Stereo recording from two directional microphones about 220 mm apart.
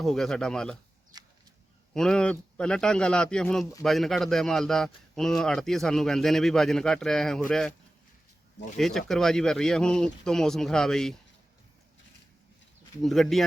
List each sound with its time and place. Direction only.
0.0 s a man's voice: centre (ahead or behind)
1.1 s a sound: 15° right (ahead or behind)
1.9 s a man's voice: 5° left (ahead or behind)
8.8 s a man's voice: centre (ahead or behind)
13.0 s a man's voice: centre (ahead or behind)